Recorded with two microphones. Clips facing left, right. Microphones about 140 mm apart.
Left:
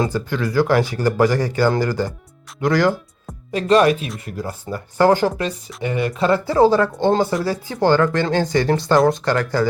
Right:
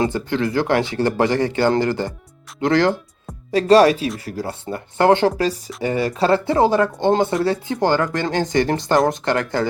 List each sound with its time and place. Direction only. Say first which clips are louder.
0.3 s speech: even; 60° right (ahead or behind)
0.6 s speech: left 5 dB; 20° right (ahead or behind)
5.5 s speech: right 3 dB; 35° right (ahead or behind)